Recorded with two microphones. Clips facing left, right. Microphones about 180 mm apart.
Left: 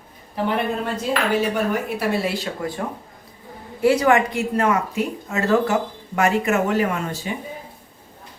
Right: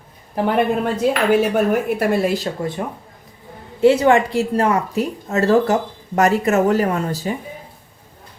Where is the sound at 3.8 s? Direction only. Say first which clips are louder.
Right 3 dB; 25° right (ahead or behind).